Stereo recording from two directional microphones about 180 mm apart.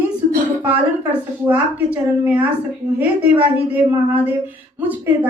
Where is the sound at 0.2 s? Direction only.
50° right (ahead or behind).